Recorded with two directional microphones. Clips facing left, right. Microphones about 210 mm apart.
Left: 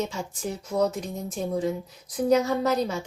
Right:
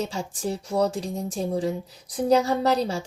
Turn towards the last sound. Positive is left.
turn(degrees=-30)  # may be behind; listen again after turning